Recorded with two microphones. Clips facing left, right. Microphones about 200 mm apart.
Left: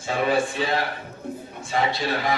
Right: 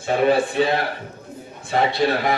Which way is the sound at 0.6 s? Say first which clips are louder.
Right 7 dB; 60° right (ahead or behind).